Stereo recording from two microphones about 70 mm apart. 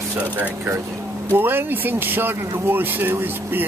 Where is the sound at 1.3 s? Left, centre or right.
Right.